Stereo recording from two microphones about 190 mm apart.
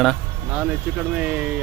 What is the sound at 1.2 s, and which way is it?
Speech, 5° right (ahead or behind).